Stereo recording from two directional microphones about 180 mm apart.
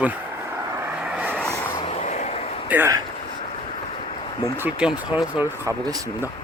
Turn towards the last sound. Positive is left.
turn(degrees=-20)  # may be behind; listen again after turning